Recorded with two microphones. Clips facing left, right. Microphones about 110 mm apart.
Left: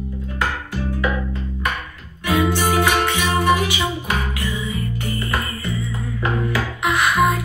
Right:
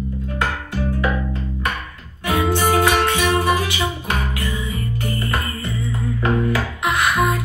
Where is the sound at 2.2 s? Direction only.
25° right (ahead or behind).